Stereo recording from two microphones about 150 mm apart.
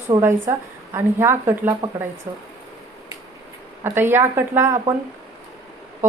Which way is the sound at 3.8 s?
15° right (ahead or behind).